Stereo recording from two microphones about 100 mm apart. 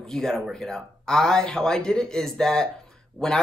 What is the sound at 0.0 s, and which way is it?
Speech, 5° left (ahead or behind).